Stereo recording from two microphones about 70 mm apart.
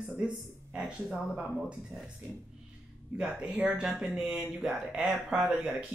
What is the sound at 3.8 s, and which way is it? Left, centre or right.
Speech, centre.